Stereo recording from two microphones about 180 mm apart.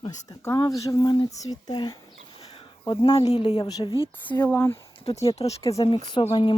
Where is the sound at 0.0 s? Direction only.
20° left (ahead or behind).